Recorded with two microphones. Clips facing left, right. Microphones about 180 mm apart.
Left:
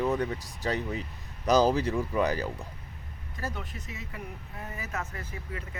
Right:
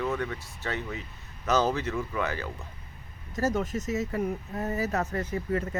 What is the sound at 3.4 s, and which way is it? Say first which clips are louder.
Speech: right 10 dB; 45° right (ahead or behind).